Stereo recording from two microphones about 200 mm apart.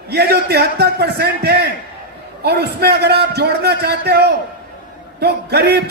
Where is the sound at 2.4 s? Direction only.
55° right (ahead or behind).